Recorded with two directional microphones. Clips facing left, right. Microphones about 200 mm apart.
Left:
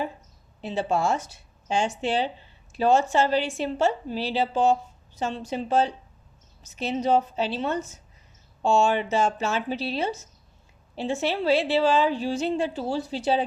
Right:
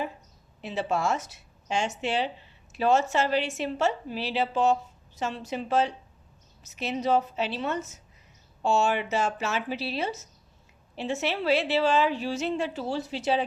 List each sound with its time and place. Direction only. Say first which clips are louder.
0.6 s a woman's voice: left 3 dB; 30° left (ahead or behind)